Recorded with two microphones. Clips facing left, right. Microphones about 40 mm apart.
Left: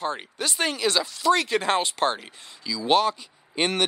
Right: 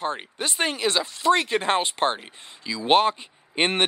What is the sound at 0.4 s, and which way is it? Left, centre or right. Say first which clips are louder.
Speech: even; right.